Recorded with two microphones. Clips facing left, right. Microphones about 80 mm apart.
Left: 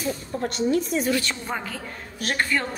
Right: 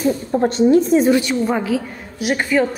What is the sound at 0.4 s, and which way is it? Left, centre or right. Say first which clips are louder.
Speech: right 10 dB; right.